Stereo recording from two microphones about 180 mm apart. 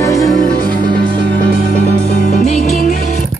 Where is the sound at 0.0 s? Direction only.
15° left (ahead or behind).